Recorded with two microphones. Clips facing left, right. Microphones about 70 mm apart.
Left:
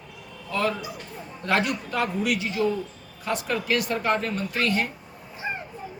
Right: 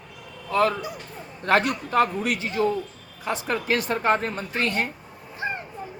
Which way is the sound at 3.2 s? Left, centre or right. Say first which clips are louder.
Even; right.